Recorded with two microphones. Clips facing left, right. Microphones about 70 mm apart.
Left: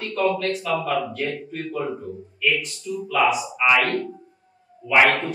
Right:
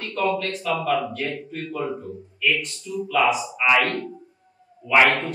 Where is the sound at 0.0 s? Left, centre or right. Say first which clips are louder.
Left 2 dB; centre.